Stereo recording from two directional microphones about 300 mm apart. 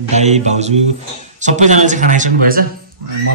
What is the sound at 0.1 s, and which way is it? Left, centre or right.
Speech, right.